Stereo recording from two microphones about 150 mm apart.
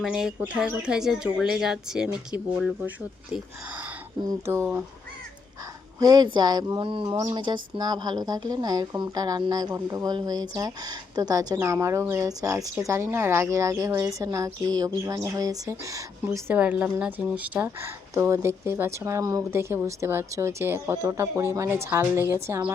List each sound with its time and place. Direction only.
0.0 s speech: 5° right (ahead or behind)
4.3 s speech: 20° right (ahead or behind)
6.0 s speech: 25° right (ahead or behind)
16.6 s speech: 10° right (ahead or behind)